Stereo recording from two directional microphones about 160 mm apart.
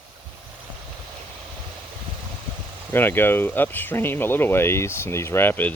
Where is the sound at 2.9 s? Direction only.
15° left (ahead or behind).